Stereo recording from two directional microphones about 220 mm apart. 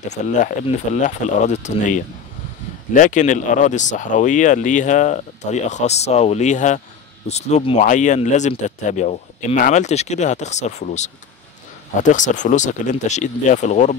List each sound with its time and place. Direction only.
0.1 s speech: 30° left (ahead or behind)